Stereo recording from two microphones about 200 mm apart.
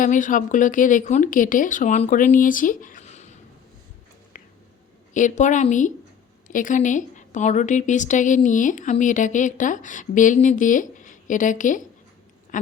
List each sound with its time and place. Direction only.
0.0 s a woman's voice: 40° left (ahead or behind)
5.1 s a woman's voice: 40° left (ahead or behind)